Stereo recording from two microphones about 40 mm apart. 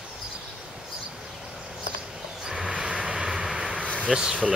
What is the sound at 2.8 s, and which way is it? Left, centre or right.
Vehicle, centre.